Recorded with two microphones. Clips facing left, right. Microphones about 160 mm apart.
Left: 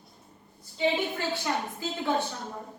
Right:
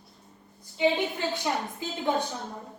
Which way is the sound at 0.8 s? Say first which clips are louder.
Right 2 dB; 15° right (ahead or behind).